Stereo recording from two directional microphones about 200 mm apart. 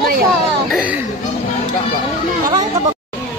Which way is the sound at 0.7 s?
5° right (ahead or behind).